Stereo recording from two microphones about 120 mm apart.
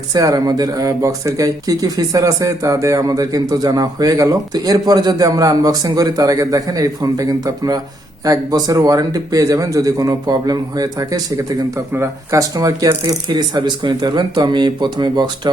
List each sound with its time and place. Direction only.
0.1 s speech: 30° right (ahead or behind)